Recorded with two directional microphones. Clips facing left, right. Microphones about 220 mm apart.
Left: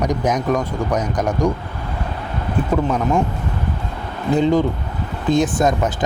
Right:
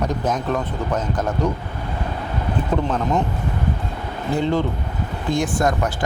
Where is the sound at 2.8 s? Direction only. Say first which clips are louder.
Left 3 dB; 10° left (ahead or behind).